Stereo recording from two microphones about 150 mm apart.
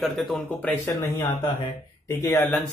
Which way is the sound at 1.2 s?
30° left (ahead or behind).